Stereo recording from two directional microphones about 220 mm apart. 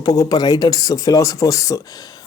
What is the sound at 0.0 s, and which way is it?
Speech, 15° left (ahead or behind).